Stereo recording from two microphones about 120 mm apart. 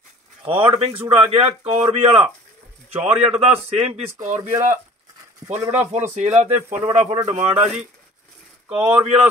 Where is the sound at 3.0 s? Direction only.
10° right (ahead or behind).